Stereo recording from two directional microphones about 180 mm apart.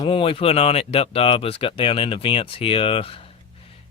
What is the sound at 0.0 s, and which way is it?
Speech, 30° left (ahead or behind).